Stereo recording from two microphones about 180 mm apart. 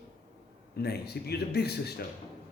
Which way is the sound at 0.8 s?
65° left (ahead or behind).